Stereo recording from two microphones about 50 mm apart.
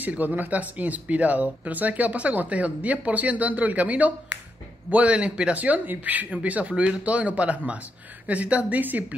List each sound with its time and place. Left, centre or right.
0.0 s speech: right